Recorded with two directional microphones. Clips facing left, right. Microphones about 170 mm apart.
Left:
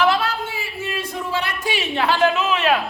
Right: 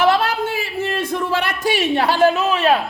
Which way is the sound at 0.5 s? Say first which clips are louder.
Right 5 dB; 75° right (ahead or behind).